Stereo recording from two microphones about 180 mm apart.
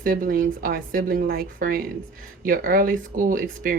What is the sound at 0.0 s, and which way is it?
Speech, 50° right (ahead or behind).